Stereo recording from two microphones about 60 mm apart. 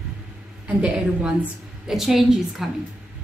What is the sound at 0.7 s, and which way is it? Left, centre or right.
Speech, centre.